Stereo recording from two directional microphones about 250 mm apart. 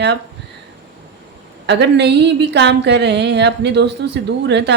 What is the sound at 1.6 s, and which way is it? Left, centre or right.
Speech, right.